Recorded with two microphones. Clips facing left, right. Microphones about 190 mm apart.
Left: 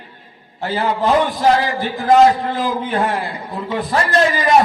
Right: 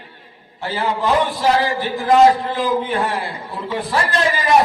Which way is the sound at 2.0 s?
45° left (ahead or behind).